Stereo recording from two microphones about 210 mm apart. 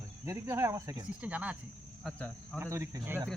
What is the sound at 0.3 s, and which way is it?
Speech, 10° right (ahead or behind).